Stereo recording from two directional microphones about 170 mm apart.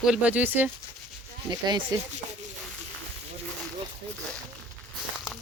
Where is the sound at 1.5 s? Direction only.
25° right (ahead or behind).